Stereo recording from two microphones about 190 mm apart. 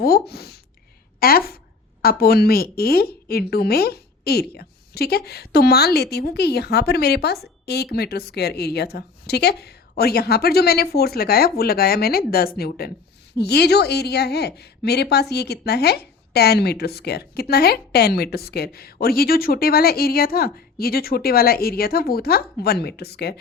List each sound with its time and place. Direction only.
0.0 s a woman's voice: 55° left (ahead or behind)